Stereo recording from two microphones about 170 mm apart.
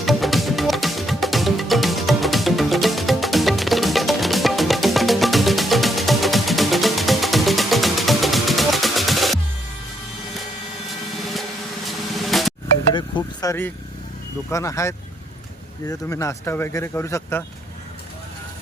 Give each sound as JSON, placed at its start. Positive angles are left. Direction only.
{"t": 0.0, "sound": "music", "side_deg": 0}
{"t": 11.9, "sound": "drum", "side_deg": 0}
{"t": 12.9, "sound": "vehicle", "side_deg": 25}
{"t": 14.5, "sound": "speech", "side_deg": 20}